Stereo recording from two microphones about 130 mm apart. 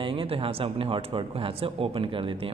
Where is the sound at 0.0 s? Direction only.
45° right (ahead or behind).